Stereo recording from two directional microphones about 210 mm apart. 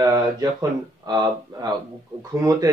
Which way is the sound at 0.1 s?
20° right (ahead or behind).